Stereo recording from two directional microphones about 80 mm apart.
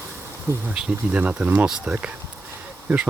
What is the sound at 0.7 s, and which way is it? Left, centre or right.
Speech, centre.